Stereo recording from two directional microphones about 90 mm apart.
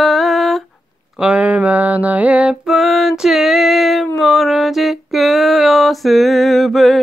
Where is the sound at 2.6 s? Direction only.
Centre (ahead or behind).